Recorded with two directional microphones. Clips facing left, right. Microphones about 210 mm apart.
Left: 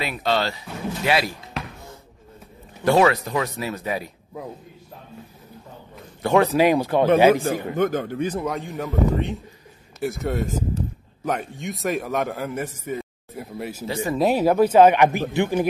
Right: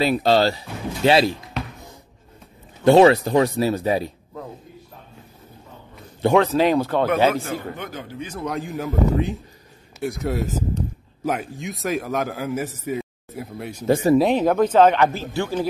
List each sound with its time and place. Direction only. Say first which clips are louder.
0.0 s speech: right 6 dB; 35° right (ahead or behind)
2.8 s speech: right 5 dB; 25° right (ahead or behind)
6.3 s speech: left 1 dB; 10° left (ahead or behind)
7.7 s speech: left 11 dB; 50° left (ahead or behind)
8.5 s speech: right 1 dB; centre (ahead or behind)
13.8 s speech: right 9 dB; 50° right (ahead or behind)
14.1 s speech: left 2 dB; 5° left (ahead or behind)